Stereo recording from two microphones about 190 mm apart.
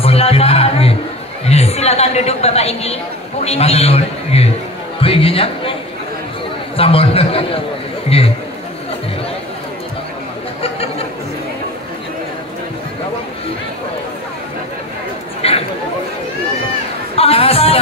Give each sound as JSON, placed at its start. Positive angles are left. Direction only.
{"t": 0.0, "sound": "music", "side_deg": 30}
{"t": 1.4, "sound": "a woman's voice", "side_deg": 35}
{"t": 6.8, "sound": "a man's voice", "side_deg": 30}
{"t": 10.6, "sound": "a sound", "side_deg": 30}
{"t": 15.4, "sound": "chatter", "side_deg": 30}
{"t": 17.1, "sound": "chatter", "side_deg": 30}